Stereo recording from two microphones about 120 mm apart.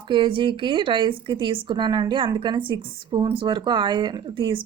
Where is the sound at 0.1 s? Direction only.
45° right (ahead or behind).